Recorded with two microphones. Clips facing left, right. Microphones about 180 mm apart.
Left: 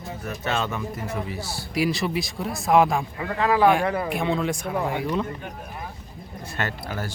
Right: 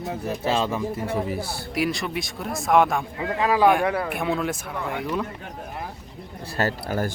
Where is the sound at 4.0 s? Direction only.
Centre (ahead or behind).